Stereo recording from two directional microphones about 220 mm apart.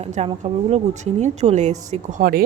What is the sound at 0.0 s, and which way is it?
A woman's voice, 30° right (ahead or behind).